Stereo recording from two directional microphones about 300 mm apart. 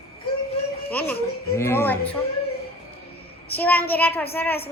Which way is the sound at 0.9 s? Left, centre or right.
Centre.